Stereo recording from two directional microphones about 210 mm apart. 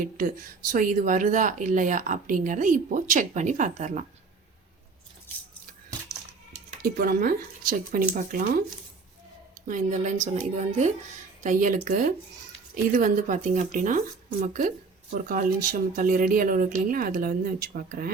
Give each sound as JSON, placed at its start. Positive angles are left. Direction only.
{"t": 0.0, "sound": "speech", "side_deg": -40}
{"t": 6.8, "sound": "speech", "side_deg": -45}
{"t": 9.6, "sound": "speech", "side_deg": -35}